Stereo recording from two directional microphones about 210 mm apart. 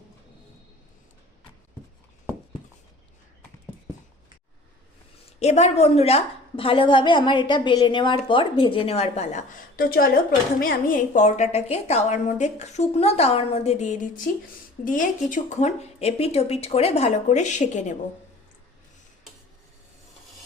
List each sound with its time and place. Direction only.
5.4 s a woman's voice: 30° left (ahead or behind)